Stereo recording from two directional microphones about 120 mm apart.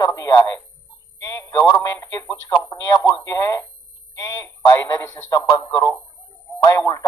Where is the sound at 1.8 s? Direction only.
30° left (ahead or behind).